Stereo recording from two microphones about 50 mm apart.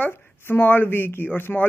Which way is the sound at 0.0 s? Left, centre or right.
Left.